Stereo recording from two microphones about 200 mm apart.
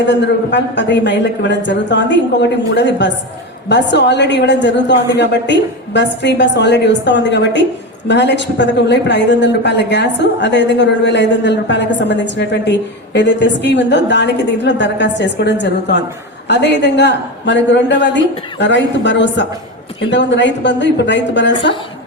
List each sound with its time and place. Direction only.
0.1 s a woman's voice: 60° left (ahead or behind)